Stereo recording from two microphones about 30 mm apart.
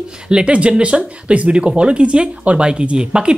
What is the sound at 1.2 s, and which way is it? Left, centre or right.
Speech, right.